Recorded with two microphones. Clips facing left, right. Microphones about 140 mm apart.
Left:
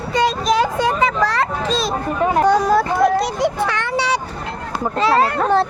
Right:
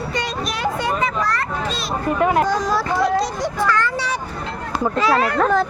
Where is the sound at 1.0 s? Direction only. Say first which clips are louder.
Left 4 dB; 90° left.